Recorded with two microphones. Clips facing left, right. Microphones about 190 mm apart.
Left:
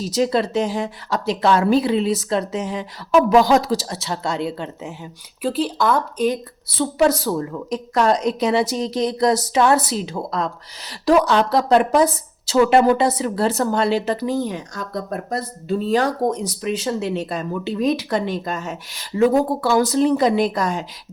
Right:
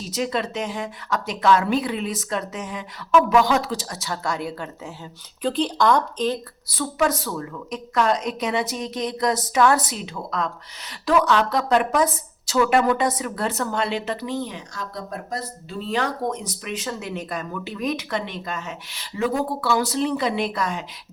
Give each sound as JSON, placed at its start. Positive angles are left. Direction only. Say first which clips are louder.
{"t": 0.1, "sound": "a woman's voice", "louder": "left 6 dB", "side_deg": 35}
{"t": 5.4, "sound": "speech", "louder": "left 1 dB", "side_deg": 5}
{"t": 6.7, "sound": "a woman's voice", "louder": "left 5 dB", "side_deg": 30}